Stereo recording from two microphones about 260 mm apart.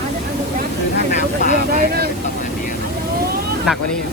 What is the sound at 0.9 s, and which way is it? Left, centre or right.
Vehicle, left.